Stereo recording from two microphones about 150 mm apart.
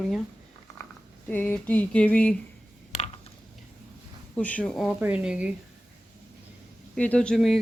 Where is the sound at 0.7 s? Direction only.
20° left (ahead or behind).